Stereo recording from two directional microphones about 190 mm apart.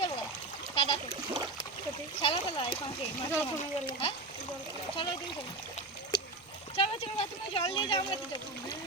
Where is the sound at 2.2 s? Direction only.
30° left (ahead or behind).